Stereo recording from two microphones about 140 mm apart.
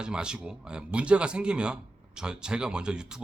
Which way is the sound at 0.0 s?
5° right (ahead or behind).